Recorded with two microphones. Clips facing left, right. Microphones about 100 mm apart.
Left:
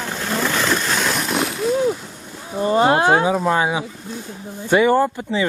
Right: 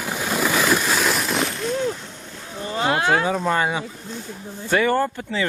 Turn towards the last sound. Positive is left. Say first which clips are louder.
# left 4 dB
turn(degrees=15)  # may be behind; listen again after turning